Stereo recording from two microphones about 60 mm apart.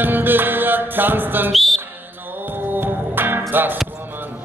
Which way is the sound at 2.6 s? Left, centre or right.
Right.